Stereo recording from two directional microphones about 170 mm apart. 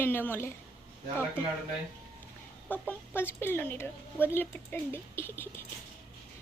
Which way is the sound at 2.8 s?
10° left (ahead or behind).